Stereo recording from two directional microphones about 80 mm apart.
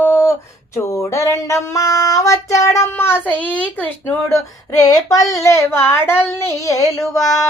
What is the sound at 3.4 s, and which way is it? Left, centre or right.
Speech, centre.